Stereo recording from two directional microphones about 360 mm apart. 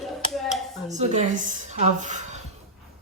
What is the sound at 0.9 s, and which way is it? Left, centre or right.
A woman's voice, centre.